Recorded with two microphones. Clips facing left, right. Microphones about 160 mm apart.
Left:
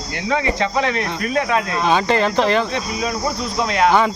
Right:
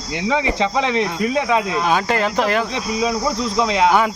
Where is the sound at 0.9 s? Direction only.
20° right (ahead or behind).